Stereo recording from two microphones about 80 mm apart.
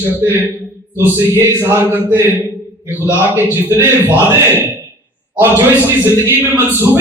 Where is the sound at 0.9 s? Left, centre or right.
Right.